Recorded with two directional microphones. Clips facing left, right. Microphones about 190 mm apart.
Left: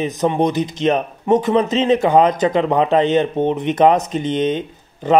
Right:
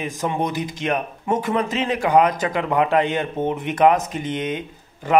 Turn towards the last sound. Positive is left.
turn(degrees=20)  # may be behind; listen again after turning